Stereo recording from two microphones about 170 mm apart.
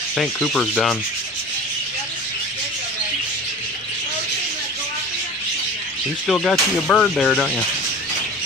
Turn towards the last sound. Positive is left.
turn(degrees=5)  # may be behind; listen again after turning